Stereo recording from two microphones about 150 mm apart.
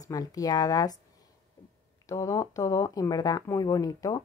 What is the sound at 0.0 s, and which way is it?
Speech, 25° left (ahead or behind).